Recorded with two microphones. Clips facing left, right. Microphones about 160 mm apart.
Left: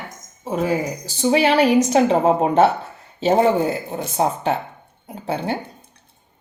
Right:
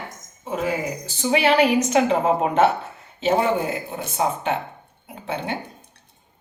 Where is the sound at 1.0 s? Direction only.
35° left (ahead or behind).